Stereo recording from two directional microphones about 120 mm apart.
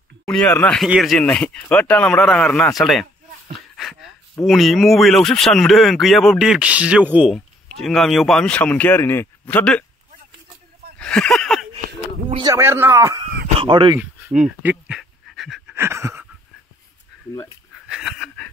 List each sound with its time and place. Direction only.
0.2 s speech: 5° left (ahead or behind)
1.2 s speech: 10° left (ahead or behind)
3.5 s a sound: centre (ahead or behind)
4.5 s speech: centre (ahead or behind)
7.3 s speech: 5° left (ahead or behind)
11.0 s a sound: 5° left (ahead or behind)
12.5 s a man's voice: 20° right (ahead or behind)
13.6 s speech: 45° right (ahead or behind)
14.4 s speech: 10° right (ahead or behind)
15.0 s pant: centre (ahead or behind)
15.7 s a sound: 20° right (ahead or behind)
17.7 s a sound: 5° right (ahead or behind)